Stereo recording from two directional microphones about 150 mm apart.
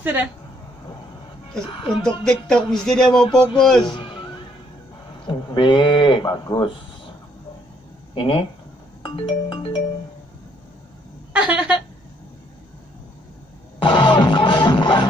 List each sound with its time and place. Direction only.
0.0 s speech: 10° right (ahead or behind)
1.7 s speech: 35° left (ahead or behind)
2.2 s speech: 5° left (ahead or behind)
3.8 s music: 30° left (ahead or behind)
5.2 s speech: 30° left (ahead or behind)
8.1 s speech: 35° left (ahead or behind)
9.0 s music: 35° left (ahead or behind)
11.3 s a woman's voice: 5° right (ahead or behind)
13.7 s music: 35° left (ahead or behind)